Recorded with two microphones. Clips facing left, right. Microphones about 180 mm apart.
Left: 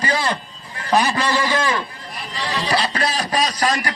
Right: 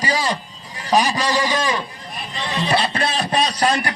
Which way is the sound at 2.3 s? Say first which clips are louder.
Right 1 dB; 25° right (ahead or behind).